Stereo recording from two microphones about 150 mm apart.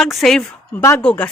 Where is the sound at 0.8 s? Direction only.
20° left (ahead or behind).